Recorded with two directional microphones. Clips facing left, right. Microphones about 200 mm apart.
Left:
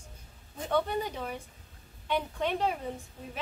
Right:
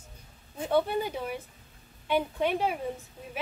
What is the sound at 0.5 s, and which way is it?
Speech, 10° right (ahead or behind).